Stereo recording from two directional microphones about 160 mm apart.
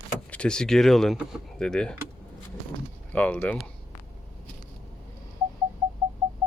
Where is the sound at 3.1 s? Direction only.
10° left (ahead or behind).